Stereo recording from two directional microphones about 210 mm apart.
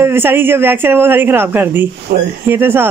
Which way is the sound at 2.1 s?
45° right (ahead or behind).